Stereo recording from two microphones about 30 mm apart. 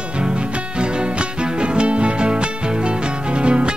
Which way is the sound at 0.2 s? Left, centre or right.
Right.